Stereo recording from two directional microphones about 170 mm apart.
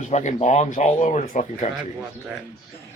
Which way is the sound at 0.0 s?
45° left (ahead or behind).